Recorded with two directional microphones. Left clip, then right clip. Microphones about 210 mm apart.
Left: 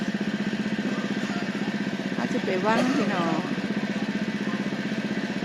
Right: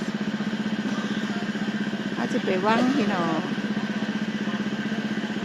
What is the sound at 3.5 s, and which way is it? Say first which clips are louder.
Vehicle: even; 55° left (ahead or behind).